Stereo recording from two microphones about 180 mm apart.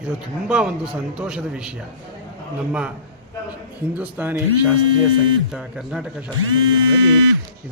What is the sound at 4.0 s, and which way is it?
Speech, 10° right (ahead or behind).